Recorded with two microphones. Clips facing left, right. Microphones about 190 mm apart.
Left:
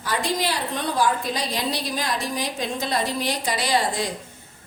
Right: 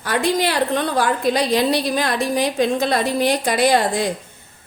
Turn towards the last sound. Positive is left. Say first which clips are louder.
# right 7 dB
turn(degrees=-55)  # may be behind; listen again after turning